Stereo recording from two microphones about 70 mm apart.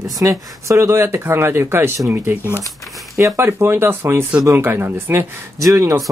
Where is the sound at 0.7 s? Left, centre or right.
Right.